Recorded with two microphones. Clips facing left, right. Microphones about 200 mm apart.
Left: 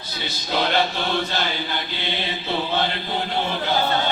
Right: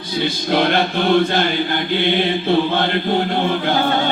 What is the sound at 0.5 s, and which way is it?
Mantra, 55° right (ahead or behind).